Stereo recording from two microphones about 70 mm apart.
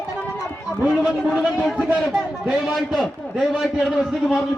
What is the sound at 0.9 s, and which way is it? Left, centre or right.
A man's voice, centre.